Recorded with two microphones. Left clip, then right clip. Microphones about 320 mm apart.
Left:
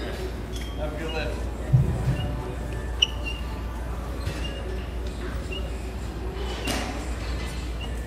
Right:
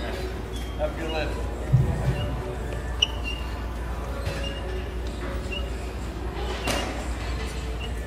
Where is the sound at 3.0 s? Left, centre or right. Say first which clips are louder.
Left 1 dB; left.